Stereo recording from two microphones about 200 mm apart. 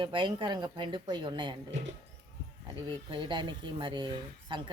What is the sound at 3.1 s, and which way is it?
Speech, 25° right (ahead or behind).